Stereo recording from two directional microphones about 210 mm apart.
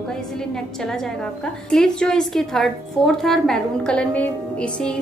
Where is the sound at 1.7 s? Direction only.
5° left (ahead or behind).